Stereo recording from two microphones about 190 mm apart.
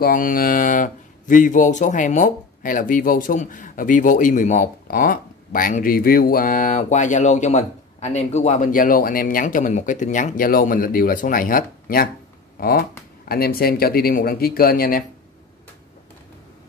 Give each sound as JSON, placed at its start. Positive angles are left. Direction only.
{"t": 0.0, "sound": "speech", "side_deg": 45}